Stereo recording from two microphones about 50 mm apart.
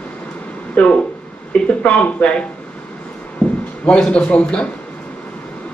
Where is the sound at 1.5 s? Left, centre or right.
Left.